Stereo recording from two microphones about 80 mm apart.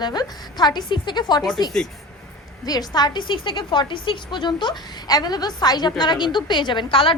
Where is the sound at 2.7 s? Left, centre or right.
Left.